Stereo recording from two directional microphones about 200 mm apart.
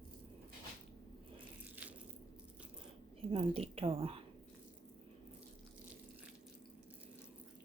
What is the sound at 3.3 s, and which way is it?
Speech, 30° right (ahead or behind).